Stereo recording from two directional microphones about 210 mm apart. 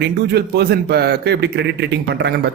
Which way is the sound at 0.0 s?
50° right (ahead or behind).